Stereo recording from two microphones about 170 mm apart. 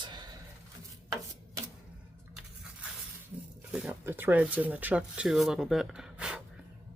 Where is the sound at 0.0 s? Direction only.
25° right (ahead or behind).